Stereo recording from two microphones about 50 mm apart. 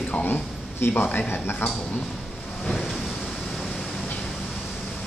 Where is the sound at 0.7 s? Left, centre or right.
Left.